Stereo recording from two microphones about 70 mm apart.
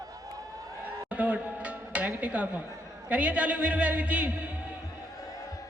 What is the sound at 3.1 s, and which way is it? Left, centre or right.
A man's voice, centre.